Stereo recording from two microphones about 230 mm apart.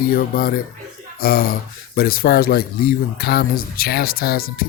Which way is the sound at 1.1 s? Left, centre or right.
Left.